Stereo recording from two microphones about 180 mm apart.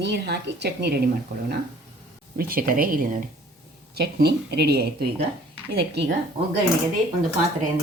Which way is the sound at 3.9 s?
65° right (ahead or behind).